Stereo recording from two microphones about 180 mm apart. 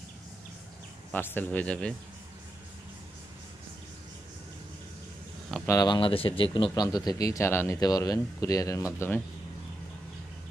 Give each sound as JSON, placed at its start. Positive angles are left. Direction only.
{"t": 1.1, "sound": "speech", "side_deg": 10}
{"t": 5.7, "sound": "speech", "side_deg": 20}